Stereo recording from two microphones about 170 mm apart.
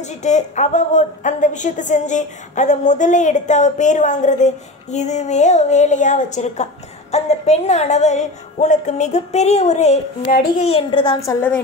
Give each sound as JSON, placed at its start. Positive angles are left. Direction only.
{"t": 0.0, "sound": "a woman's voice", "side_deg": 45}
{"t": 10.3, "sound": "a woman's voice", "side_deg": 50}
{"t": 10.6, "sound": "a child's voice", "side_deg": 35}
{"t": 11.1, "sound": "a woman's voice", "side_deg": 15}